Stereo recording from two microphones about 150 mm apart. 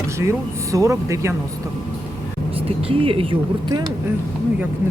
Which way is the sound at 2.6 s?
35° right (ahead or behind).